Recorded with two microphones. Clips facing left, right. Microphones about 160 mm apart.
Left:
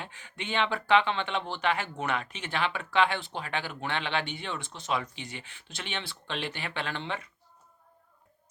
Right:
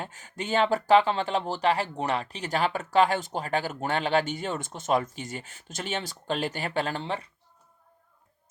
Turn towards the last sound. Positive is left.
turn(degrees=-35)  # may be behind; listen again after turning